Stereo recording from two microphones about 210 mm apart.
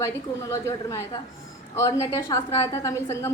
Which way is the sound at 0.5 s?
15° left (ahead or behind).